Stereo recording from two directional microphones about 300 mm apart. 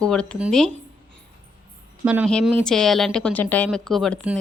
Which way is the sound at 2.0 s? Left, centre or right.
Centre.